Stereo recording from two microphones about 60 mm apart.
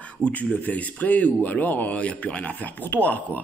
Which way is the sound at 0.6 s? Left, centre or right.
Left.